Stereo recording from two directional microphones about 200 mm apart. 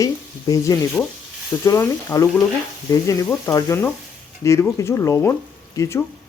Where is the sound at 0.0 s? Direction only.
15° left (ahead or behind).